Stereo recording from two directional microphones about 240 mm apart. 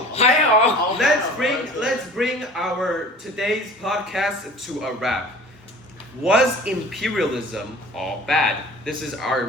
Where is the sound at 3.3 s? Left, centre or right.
Centre.